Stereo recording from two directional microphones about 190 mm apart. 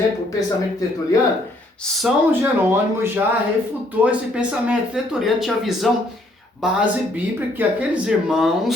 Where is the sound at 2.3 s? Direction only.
10° right (ahead or behind).